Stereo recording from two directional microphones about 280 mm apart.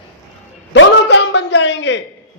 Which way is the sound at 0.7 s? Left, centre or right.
Left.